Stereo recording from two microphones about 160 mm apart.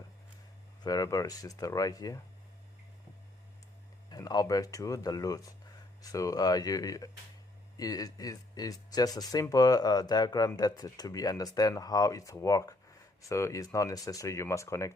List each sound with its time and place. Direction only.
0.8 s speech: 25° left (ahead or behind)
4.1 s speech: 25° left (ahead or behind)